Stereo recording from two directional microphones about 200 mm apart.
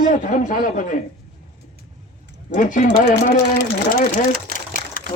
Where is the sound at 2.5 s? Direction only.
40° left (ahead or behind).